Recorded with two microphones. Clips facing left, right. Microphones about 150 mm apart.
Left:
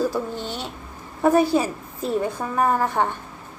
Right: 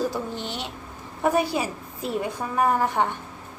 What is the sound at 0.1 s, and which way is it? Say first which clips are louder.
Speech: left 3 dB; 15° right (ahead or behind).